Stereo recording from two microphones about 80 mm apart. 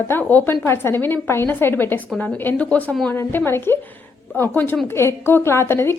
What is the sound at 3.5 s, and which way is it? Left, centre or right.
A woman's voice, left.